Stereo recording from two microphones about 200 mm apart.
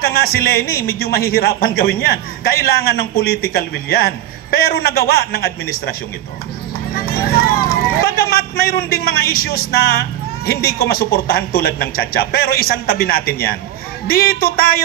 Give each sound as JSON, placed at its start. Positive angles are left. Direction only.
{"t": 0.0, "sound": "speech", "side_deg": 50}
{"t": 7.0, "sound": "speech", "side_deg": 50}